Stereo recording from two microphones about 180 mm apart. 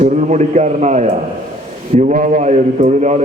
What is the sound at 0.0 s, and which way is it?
A man's voice, 40° right (ahead or behind).